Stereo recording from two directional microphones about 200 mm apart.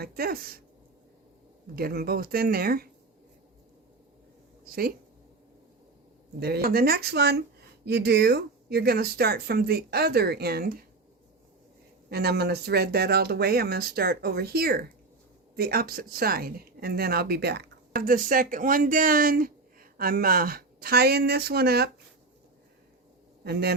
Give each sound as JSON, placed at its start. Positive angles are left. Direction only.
{"t": 0.0, "sound": "speech", "side_deg": -50}
{"t": 1.7, "sound": "speech", "side_deg": -50}
{"t": 4.6, "sound": "speech", "side_deg": -45}
{"t": 6.4, "sound": "speech", "side_deg": -50}
{"t": 12.0, "sound": "speech", "side_deg": -55}
{"t": 23.4, "sound": "a man's voice", "side_deg": -55}